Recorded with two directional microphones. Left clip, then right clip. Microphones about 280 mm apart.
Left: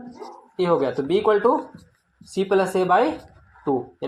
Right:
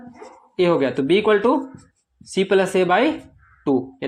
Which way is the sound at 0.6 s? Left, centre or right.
Right.